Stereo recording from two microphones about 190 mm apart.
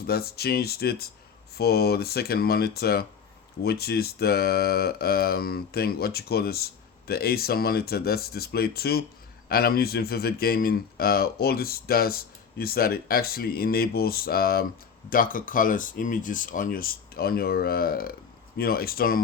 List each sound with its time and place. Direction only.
0.1 s speech: 55° left (ahead or behind)